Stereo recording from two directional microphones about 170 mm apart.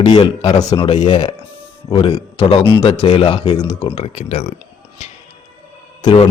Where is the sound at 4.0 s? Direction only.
40° left (ahead or behind).